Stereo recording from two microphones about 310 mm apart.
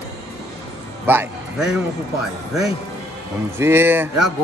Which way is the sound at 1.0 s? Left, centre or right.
Centre.